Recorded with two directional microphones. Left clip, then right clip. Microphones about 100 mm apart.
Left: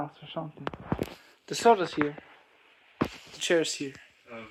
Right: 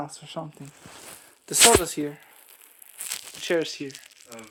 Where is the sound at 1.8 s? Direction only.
65° right (ahead or behind).